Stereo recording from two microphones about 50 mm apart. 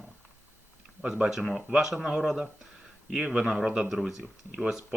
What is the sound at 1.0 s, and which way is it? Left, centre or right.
Speech, centre.